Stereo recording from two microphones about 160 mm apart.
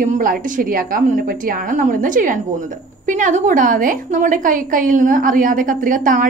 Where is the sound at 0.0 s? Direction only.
55° right (ahead or behind).